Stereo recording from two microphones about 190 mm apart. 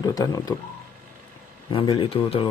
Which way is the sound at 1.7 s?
30° left (ahead or behind).